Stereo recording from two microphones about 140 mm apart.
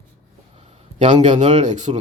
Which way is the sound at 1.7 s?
60° right (ahead or behind).